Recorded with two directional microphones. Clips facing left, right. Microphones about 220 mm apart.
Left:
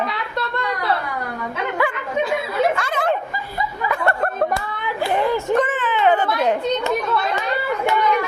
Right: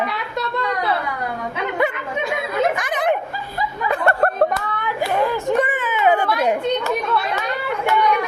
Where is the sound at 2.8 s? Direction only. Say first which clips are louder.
Right 1 dB; 15° right (ahead or behind).